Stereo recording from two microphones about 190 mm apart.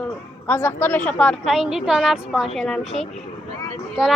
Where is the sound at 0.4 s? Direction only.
10° left (ahead or behind).